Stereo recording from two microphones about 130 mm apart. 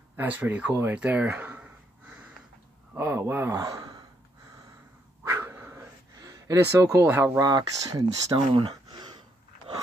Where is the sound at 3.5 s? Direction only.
30° right (ahead or behind).